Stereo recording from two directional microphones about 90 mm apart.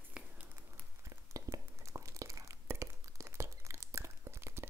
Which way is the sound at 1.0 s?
35° right (ahead or behind).